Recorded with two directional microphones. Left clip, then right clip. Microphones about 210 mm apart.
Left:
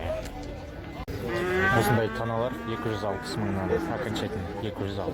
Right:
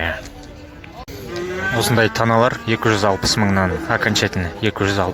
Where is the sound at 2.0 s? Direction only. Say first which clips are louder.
Right 13 dB; 25° right (ahead or behind).